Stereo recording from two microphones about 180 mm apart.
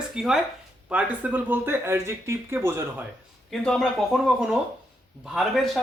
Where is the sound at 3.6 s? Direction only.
Centre (ahead or behind).